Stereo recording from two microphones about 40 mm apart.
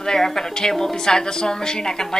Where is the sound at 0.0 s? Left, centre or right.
Centre.